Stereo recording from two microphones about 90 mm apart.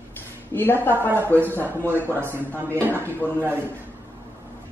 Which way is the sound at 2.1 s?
25° right (ahead or behind).